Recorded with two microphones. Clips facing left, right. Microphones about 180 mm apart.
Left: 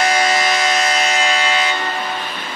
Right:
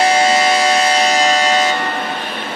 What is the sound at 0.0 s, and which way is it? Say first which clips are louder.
Siren: right 4 dB; 30° right (ahead or behind).